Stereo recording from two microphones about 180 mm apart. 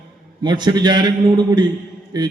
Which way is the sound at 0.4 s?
25° right (ahead or behind).